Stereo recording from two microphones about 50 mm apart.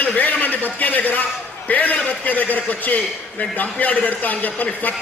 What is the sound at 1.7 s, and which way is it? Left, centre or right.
A man's voice, left.